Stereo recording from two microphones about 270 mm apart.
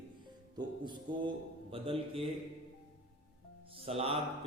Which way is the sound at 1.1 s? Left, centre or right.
Centre.